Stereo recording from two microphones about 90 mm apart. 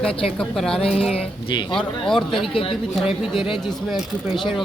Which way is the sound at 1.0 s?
90° left.